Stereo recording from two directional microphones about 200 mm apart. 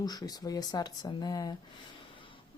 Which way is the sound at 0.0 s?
20° left (ahead or behind).